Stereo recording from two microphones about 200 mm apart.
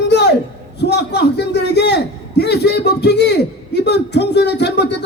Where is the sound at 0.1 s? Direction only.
60° left (ahead or behind).